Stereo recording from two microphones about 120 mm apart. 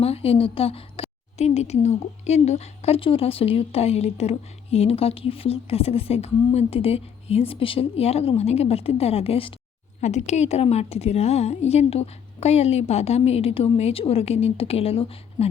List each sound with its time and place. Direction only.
0.0 s a woman's voice: 55° left (ahead or behind)
10.0 s a woman's voice: 70° left (ahead or behind); by 15.4 s 55° left (ahead or behind)